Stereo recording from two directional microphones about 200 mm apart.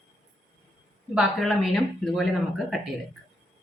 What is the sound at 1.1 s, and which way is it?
Speech, centre (ahead or behind).